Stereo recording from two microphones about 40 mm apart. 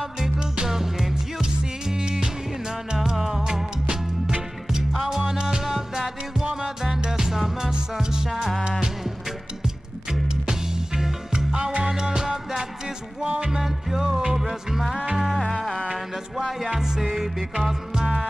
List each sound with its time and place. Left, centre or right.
0.2 s music: centre
5.7 s music: centre
8.3 s music: centre
10.5 s music: centre
16.4 s music: centre